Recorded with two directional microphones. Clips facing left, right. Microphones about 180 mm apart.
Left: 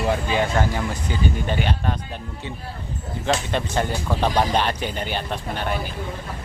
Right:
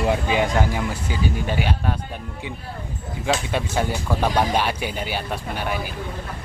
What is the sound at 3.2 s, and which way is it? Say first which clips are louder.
Speech: even; 10° right (ahead or behind).